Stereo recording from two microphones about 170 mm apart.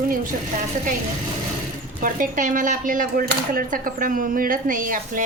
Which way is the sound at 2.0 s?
55° right (ahead or behind).